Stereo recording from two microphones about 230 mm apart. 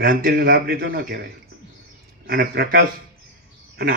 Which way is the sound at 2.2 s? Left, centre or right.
Right.